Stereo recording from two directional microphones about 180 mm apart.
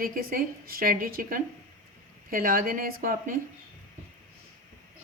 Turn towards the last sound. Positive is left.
turn(degrees=-50)  # may be behind; listen again after turning